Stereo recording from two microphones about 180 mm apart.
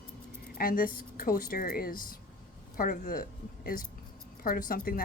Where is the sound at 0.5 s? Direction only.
50° left (ahead or behind).